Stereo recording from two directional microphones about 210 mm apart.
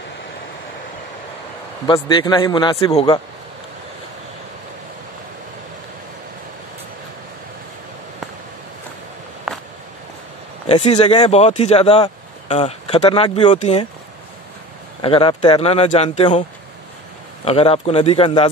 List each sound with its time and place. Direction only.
1.9 s speech: 20° left (ahead or behind)
9.5 s a sound: 5° right (ahead or behind)
10.7 s speech: 30° left (ahead or behind)
15.0 s speech: 25° left (ahead or behind)
17.5 s speech: 30° left (ahead or behind)